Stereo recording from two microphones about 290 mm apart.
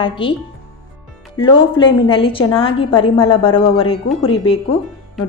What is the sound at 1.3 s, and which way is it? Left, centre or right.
A woman's voice, centre.